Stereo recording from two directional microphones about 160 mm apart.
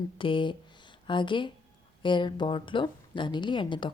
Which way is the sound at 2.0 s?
30° left (ahead or behind).